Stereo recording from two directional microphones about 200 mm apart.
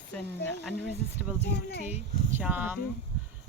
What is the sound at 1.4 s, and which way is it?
Speech, 50° left (ahead or behind).